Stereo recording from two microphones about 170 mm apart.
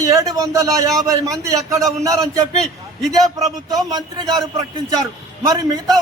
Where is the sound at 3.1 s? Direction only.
20° right (ahead or behind).